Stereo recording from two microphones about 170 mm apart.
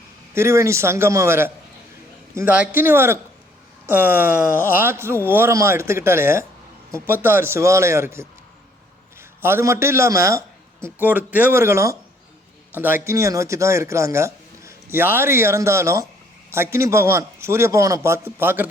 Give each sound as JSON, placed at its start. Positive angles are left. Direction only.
{"t": 0.3, "sound": "a man's voice", "side_deg": -15}
{"t": 9.4, "sound": "a man's voice", "side_deg": -15}